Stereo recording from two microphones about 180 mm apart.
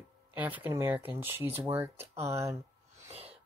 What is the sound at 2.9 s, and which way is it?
Sneeze, 35° right (ahead or behind).